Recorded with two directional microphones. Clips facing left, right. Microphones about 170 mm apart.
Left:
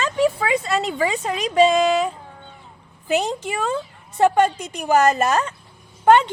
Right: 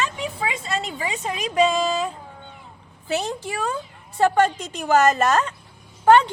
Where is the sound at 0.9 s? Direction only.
35° left (ahead or behind).